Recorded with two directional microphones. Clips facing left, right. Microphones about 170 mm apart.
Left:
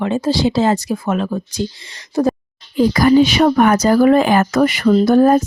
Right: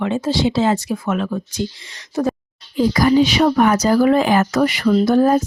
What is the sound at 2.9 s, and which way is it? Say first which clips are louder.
Speech: left 2 dB; 55° left (ahead or behind).